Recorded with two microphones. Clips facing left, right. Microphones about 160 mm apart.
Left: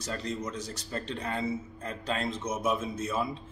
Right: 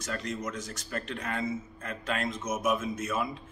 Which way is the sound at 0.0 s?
30° left (ahead or behind).